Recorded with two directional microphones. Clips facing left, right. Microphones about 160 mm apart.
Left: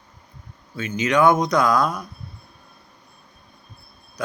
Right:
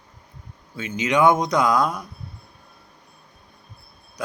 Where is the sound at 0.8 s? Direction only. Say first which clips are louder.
Left 1 dB; 15° right (ahead or behind).